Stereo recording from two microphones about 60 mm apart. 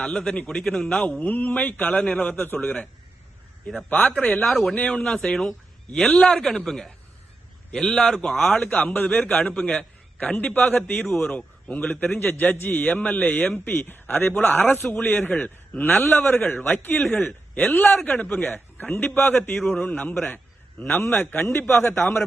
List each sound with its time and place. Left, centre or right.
0.0 s a man's voice: centre
1.2 s a man's voice: left
4.4 s speech: centre
4.7 s a man's voice: left
8.3 s a man's voice: centre
9.6 s a sound: centre
10.4 s a man's voice: centre
13.5 s a man's voice: left; by 20.3 s centre
20.3 s a sound: left
21.2 s speech: left